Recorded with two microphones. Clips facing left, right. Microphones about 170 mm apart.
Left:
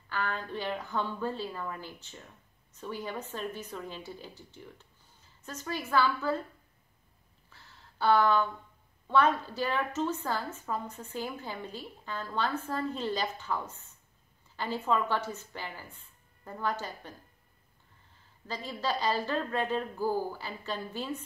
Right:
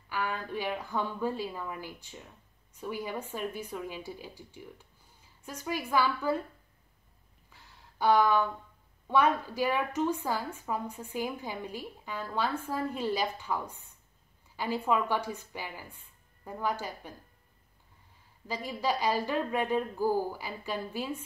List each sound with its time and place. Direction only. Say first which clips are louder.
0.1 s a woman's voice: right 1 dB; 10° right (ahead or behind)
7.4 s a sound: even; 15° right (ahead or behind)
9.0 s a woman's voice: even; 10° right (ahead or behind)
18.5 s a woman's voice: right 2 dB; 10° right (ahead or behind)